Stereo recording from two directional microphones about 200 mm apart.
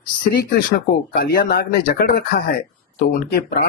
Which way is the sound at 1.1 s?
50° left (ahead or behind).